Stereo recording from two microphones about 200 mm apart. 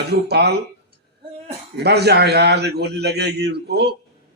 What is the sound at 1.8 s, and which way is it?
A man's voice, 55° right (ahead or behind).